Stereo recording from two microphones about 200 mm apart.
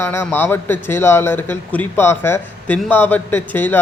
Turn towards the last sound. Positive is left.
turn(degrees=10)  # may be behind; listen again after turning